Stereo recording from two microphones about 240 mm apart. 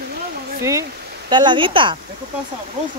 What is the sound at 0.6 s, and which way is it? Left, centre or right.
Speech, centre.